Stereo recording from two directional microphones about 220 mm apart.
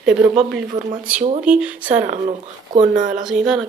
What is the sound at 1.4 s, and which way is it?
Speech, 5° right (ahead or behind).